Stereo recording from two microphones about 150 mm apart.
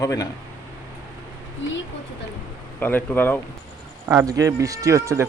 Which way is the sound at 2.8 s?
15° left (ahead or behind).